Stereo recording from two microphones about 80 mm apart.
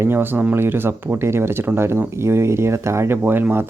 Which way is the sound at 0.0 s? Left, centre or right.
Right.